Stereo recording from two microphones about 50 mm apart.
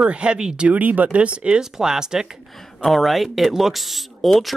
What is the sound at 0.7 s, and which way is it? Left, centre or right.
Speech, right.